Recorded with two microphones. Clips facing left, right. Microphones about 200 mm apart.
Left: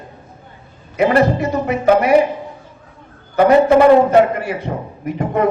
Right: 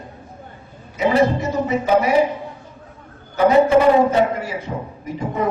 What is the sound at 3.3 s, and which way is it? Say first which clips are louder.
A man's voice: left 3 dB; 65° left (ahead or behind).